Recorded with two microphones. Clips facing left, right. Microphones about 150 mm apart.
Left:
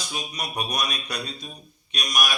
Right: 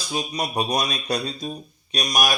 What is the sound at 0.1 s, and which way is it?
Speech, 30° right (ahead or behind).